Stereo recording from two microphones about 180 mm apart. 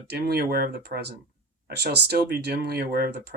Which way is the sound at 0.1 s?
60° right (ahead or behind).